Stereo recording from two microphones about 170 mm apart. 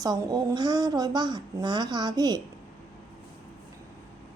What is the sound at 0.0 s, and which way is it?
A woman's voice, 25° right (ahead or behind).